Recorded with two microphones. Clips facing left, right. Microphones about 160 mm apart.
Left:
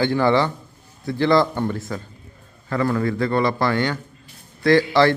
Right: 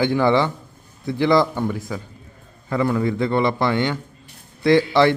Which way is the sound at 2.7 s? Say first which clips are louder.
Right 1 dB; 15° right (ahead or behind).